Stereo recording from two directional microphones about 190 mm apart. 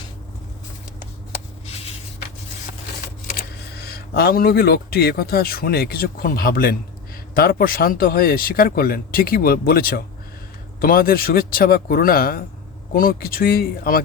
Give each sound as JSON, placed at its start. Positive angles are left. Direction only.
{"t": 3.3, "sound": "speech", "side_deg": 55}